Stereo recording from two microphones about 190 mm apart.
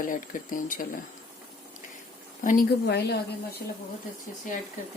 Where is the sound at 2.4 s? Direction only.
50° left (ahead or behind).